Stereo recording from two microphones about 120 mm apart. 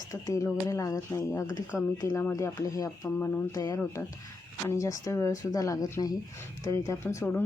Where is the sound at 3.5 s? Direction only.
30° left (ahead or behind).